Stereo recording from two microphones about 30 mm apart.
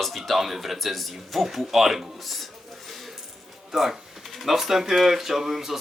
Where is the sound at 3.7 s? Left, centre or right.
Centre.